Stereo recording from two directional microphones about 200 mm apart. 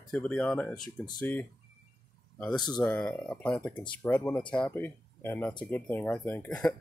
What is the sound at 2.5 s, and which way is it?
Speech, 20° left (ahead or behind).